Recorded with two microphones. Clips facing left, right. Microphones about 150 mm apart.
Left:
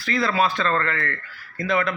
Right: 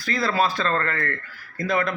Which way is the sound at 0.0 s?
35° right (ahead or behind).